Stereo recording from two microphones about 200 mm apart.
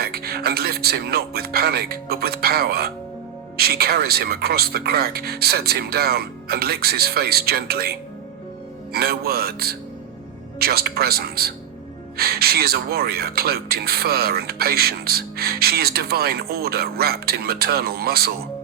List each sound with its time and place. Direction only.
0.0 s speech: 50° right (ahead or behind)